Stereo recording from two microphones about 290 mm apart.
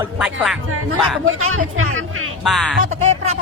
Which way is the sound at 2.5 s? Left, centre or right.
Centre.